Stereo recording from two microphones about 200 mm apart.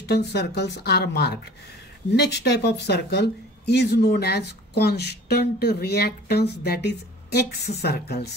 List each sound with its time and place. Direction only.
0.1 s a woman's voice: 55° left (ahead or behind)